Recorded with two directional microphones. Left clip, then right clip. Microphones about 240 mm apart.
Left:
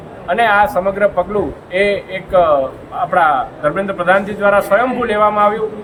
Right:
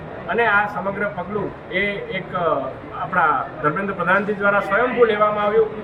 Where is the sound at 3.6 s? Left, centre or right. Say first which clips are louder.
Left 5 dB; left.